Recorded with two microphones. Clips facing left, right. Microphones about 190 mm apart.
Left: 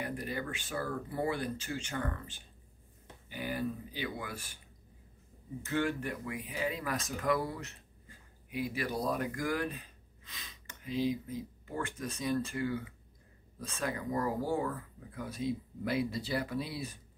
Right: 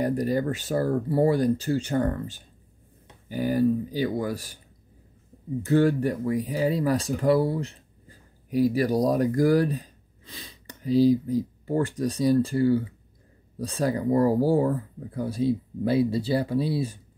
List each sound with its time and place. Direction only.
0.0 s speech: 40° right (ahead or behind)
5.6 s speech: 35° right (ahead or behind)